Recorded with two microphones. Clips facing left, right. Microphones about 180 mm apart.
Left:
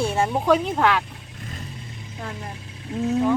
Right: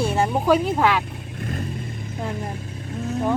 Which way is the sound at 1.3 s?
55° right (ahead or behind).